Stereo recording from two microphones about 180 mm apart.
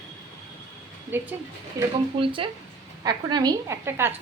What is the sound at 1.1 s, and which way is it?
Speech, 10° right (ahead or behind).